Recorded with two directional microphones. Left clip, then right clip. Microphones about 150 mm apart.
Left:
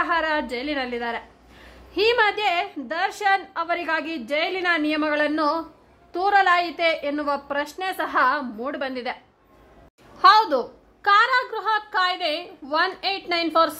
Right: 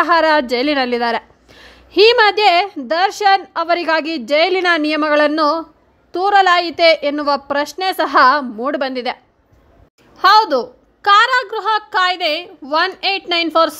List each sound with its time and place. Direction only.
0.0 s a woman's voice: 45° right (ahead or behind)
10.1 s a woman's voice: 30° right (ahead or behind)